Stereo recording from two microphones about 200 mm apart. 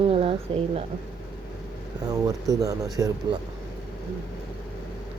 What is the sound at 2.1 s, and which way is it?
Speech, 15° right (ahead or behind).